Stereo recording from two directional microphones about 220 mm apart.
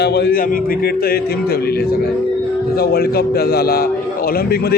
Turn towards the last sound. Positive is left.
turn(degrees=45)  # may be behind; listen again after turning